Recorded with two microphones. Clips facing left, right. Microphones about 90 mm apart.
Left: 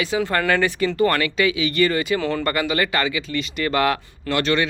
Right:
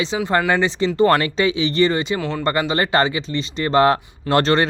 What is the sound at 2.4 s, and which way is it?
Speech, 25° right (ahead or behind).